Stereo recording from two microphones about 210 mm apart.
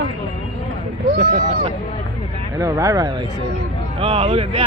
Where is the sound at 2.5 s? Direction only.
15° right (ahead or behind).